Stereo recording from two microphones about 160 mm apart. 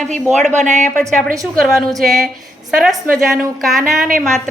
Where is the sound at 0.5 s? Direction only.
50° right (ahead or behind).